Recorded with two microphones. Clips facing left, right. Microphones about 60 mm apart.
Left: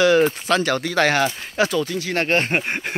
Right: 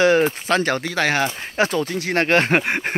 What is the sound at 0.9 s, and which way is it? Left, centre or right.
Speech, centre.